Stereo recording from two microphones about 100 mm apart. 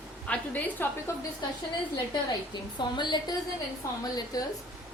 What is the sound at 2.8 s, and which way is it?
A woman's voice, 50° left (ahead or behind).